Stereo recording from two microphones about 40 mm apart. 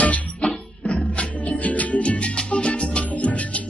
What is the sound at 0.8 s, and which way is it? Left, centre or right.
Music, left.